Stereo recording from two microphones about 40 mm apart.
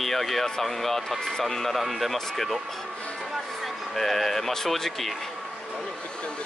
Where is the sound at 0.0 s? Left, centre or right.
Centre.